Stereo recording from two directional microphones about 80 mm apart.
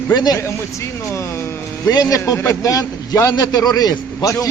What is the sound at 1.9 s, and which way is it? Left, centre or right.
Speech, left.